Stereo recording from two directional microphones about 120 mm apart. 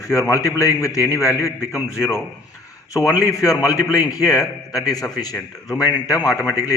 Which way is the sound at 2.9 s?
30° left (ahead or behind).